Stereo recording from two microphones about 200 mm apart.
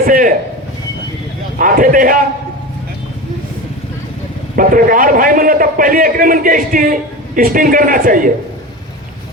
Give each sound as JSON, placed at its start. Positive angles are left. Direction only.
{"t": 0.0, "sound": "a man's voice", "side_deg": -45}
{"t": 1.5, "sound": "a man's voice", "side_deg": -45}
{"t": 4.5, "sound": "a man's voice", "side_deg": -45}